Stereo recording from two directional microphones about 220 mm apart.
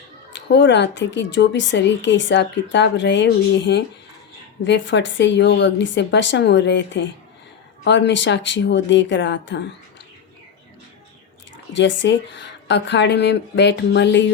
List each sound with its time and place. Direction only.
0.3 s a woman's voice: 55° left (ahead or behind)
11.7 s a woman's voice: 55° left (ahead or behind)